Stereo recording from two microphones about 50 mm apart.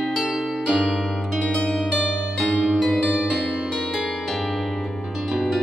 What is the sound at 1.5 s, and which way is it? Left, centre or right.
Harp, centre.